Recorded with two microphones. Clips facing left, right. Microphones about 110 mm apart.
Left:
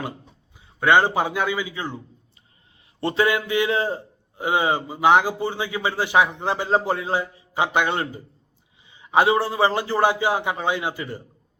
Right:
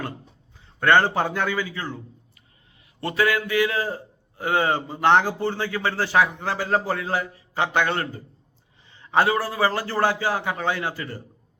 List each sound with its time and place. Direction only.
0.8 s a man's voice: 10° left (ahead or behind)
3.0 s a man's voice: 25° left (ahead or behind)